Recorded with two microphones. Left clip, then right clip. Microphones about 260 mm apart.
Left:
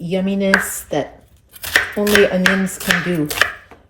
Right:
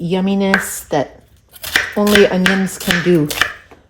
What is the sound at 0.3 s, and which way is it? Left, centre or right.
Speech, right.